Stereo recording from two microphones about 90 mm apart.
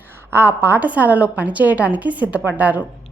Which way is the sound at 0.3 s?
25° right (ahead or behind).